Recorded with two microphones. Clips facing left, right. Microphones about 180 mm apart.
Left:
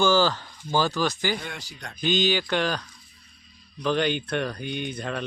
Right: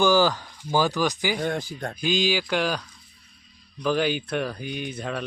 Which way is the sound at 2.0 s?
10° right (ahead or behind).